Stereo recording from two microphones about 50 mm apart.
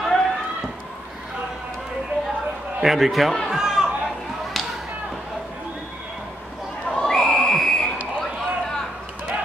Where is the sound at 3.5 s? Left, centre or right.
Centre.